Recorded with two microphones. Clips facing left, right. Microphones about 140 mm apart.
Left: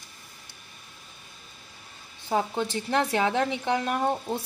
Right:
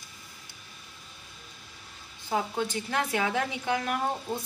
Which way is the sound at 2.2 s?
25° left (ahead or behind).